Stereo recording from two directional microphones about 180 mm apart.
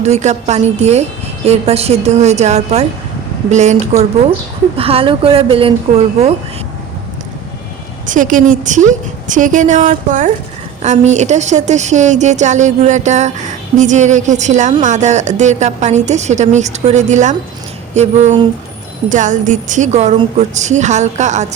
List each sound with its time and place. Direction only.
0.0 s a woman's voice: 40° right (ahead or behind)
8.0 s a woman's voice: 45° right (ahead or behind)